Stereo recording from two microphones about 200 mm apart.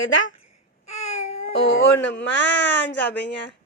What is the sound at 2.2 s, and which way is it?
Speech, 65° left (ahead or behind).